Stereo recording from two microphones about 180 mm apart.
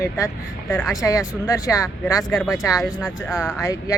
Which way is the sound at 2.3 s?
Centre (ahead or behind).